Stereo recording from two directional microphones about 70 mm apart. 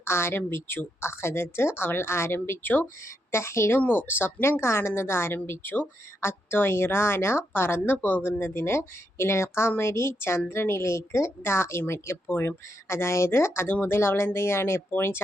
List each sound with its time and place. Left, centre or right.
0.0 s a woman's voice: left
3.8 s a woman's voice: left